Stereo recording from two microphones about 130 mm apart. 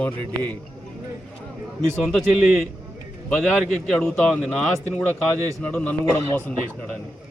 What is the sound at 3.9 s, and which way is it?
Speech, 20° left (ahead or behind).